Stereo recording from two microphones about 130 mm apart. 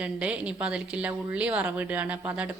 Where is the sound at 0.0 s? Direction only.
10° right (ahead or behind).